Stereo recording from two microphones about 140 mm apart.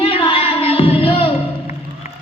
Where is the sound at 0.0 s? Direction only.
35° left (ahead or behind).